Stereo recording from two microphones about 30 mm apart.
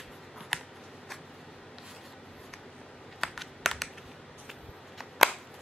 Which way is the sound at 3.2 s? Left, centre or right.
Centre.